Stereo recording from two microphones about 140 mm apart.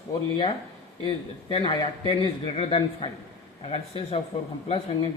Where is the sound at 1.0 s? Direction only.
35° left (ahead or behind).